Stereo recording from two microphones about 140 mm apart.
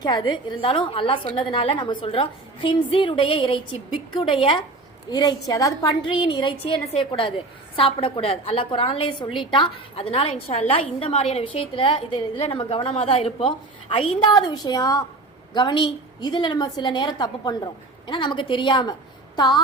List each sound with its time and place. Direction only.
0.0 s a woman's voice: 35° left (ahead or behind)